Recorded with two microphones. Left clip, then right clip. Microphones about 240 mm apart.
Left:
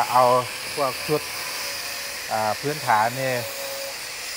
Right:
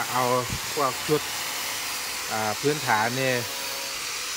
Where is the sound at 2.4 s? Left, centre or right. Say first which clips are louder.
Left 1 dB; right.